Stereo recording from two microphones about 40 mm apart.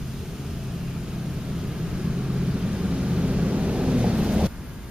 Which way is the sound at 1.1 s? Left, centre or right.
Centre.